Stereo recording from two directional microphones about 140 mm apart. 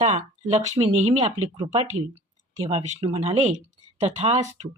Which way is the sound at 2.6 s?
45° right (ahead or behind).